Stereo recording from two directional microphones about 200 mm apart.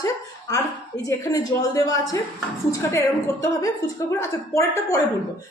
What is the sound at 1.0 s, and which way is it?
A woman's voice, 15° left (ahead or behind).